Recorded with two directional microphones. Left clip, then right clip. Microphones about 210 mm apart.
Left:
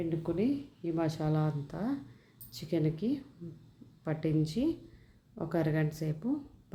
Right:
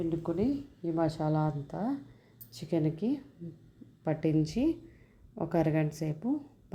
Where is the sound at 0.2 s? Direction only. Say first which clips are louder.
Right 1 dB; 10° right (ahead or behind).